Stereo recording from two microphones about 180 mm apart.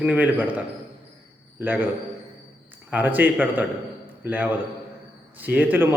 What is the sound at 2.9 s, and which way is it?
A man's voice, 10° right (ahead or behind).